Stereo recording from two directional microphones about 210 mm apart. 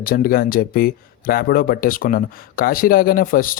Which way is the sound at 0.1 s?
45° left (ahead or behind).